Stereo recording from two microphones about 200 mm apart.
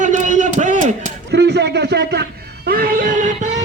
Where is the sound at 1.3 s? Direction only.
55° right (ahead or behind).